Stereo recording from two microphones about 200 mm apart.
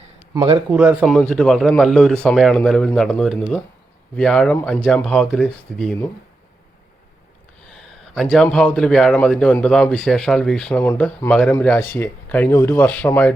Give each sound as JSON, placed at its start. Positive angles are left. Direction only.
{"t": 0.3, "sound": "a man's voice", "side_deg": -20}
{"t": 0.7, "sound": "speech", "side_deg": -5}
{"t": 7.7, "sound": "speech", "side_deg": 0}